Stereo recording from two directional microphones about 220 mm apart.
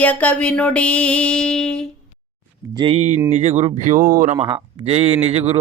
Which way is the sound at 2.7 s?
25° right (ahead or behind).